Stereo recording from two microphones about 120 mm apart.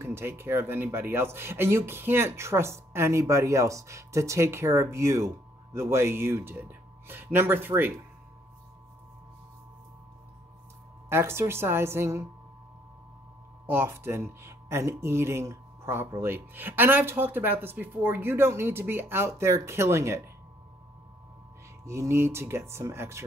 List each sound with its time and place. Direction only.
0.0 s speech: 20° right (ahead or behind)
11.1 s speech: 20° right (ahead or behind)
13.7 s speech: 20° right (ahead or behind)
21.8 s speech: 25° right (ahead or behind)